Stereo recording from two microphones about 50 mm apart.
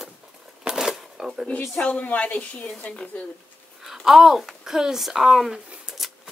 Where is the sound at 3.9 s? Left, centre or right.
Centre.